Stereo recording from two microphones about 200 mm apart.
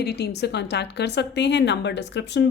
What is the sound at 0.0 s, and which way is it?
Speech, 55° left (ahead or behind).